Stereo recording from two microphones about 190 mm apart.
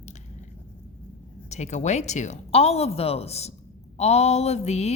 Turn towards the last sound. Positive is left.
turn(degrees=35)  # may be behind; listen again after turning